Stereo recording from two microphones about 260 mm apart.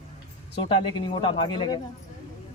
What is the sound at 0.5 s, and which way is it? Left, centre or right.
Speech, centre.